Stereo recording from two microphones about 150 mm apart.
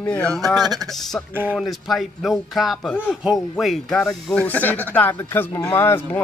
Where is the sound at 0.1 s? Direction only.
10° left (ahead or behind).